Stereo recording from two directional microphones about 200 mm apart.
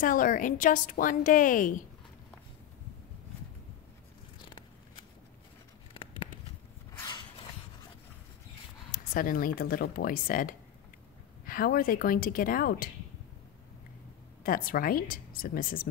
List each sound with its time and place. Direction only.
0.0 s a woman's voice: 45° left (ahead or behind)
6.0 s a sound: 25° left (ahead or behind)
8.9 s speech: 45° left (ahead or behind)
14.4 s speech: 45° left (ahead or behind)